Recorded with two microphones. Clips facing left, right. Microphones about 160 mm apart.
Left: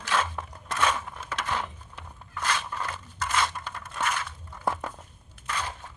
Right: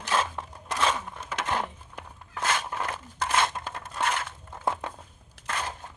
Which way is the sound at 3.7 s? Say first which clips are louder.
Right 2 dB; 30° right (ahead or behind).